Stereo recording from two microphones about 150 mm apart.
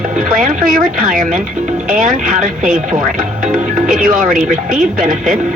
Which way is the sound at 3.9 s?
60° right (ahead or behind).